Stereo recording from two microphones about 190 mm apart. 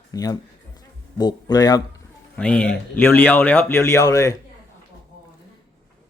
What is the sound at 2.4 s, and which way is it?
Speech, 5° left (ahead or behind).